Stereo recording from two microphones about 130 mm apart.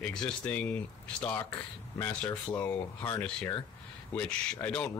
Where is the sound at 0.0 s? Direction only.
5° left (ahead or behind).